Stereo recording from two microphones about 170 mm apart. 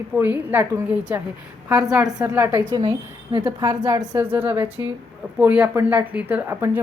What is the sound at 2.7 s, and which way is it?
A woman's voice, 25° right (ahead or behind).